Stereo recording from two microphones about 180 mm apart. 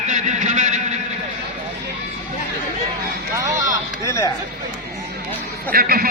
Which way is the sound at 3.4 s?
20° right (ahead or behind).